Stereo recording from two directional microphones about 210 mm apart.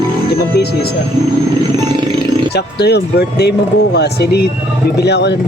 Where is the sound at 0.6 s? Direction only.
50° left (ahead or behind).